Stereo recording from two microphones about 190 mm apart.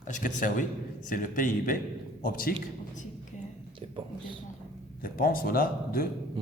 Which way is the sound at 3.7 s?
25° right (ahead or behind).